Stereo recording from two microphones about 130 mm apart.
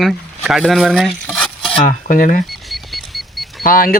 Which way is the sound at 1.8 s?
90° left.